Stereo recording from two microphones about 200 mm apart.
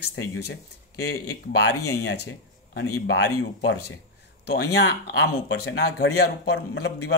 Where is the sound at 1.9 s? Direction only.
55° left (ahead or behind).